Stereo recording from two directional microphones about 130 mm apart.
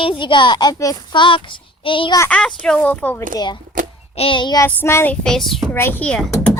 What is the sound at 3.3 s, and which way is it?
Speech, 35° left (ahead or behind).